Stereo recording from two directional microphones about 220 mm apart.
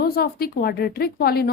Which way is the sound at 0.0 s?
45° left (ahead or behind).